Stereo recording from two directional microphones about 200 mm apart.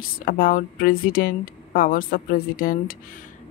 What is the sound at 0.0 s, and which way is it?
A woman's voice, 45° left (ahead or behind).